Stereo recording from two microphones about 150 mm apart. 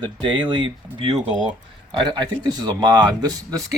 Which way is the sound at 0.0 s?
30° right (ahead or behind).